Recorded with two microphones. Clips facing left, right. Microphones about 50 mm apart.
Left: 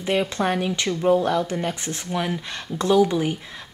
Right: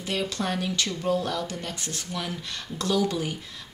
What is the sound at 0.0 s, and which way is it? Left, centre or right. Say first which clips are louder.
Speech: left 7 dB; left.